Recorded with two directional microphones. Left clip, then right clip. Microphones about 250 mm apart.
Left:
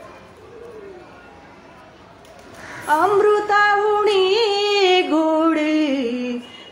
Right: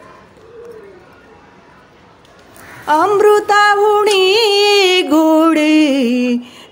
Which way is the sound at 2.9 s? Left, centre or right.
Right.